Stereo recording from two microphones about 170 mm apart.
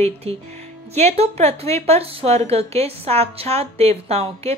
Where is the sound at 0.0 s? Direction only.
35° right (ahead or behind).